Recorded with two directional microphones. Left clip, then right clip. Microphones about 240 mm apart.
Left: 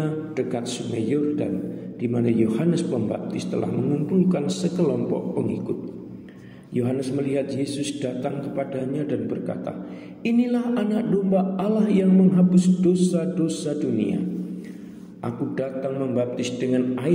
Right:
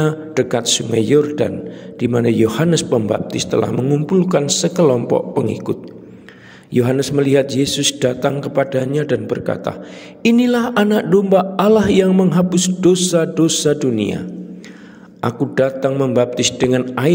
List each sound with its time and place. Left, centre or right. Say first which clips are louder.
0.0 s a man's voice: right 9 dB; right
15.2 s a man's voice: right 11 dB; right